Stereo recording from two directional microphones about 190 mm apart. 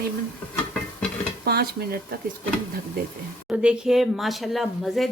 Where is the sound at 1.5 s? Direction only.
55° right (ahead or behind).